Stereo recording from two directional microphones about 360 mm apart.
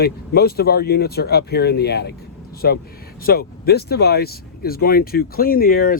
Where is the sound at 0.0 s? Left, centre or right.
Left.